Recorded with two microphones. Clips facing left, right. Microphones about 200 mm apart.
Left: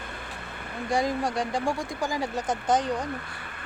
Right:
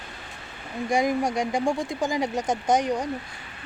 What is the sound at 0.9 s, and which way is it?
Speech, 15° right (ahead or behind).